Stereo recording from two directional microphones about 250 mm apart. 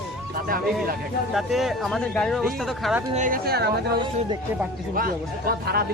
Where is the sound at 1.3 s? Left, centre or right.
Centre.